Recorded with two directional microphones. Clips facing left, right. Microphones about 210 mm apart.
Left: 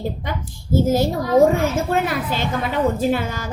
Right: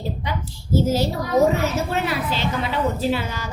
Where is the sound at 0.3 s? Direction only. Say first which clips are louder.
Left 1 dB; 50° left (ahead or behind).